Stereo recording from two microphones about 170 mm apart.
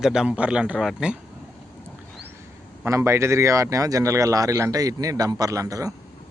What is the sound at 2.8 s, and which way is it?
Speech, 15° right (ahead or behind).